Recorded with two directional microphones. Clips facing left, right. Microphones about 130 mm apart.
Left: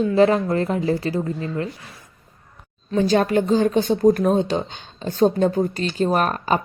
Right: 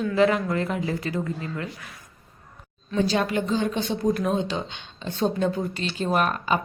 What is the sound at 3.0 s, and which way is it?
A woman's voice, 45° left (ahead or behind).